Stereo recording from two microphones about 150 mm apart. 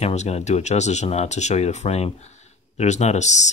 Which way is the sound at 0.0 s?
45° left (ahead or behind).